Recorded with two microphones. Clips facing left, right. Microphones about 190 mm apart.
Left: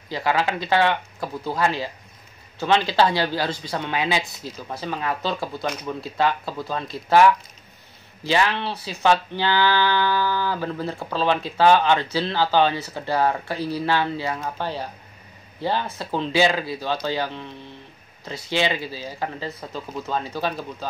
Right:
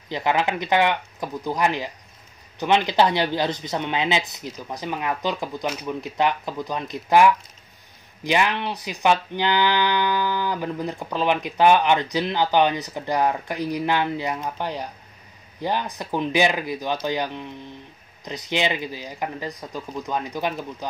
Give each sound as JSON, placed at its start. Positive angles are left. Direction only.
{"t": 0.1, "sound": "speech", "side_deg": -20}